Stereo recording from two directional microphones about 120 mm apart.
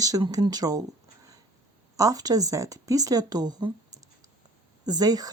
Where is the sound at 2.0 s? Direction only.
30° right (ahead or behind).